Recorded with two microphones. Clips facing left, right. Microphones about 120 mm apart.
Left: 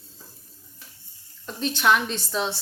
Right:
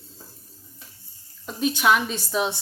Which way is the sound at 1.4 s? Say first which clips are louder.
Right 1 dB; 10° right (ahead or behind).